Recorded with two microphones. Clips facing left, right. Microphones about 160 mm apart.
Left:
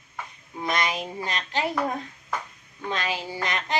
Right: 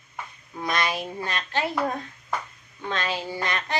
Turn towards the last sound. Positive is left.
turn(degrees=15)  # may be behind; listen again after turning